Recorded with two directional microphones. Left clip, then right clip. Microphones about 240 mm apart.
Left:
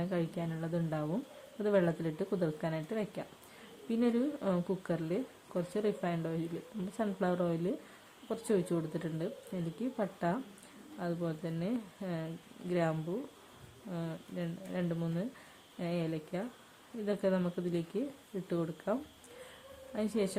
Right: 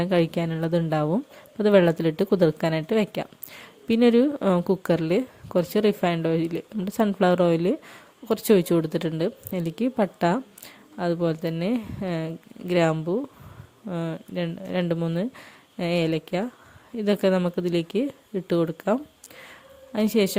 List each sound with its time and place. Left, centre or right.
0.0 s a woman's voice: right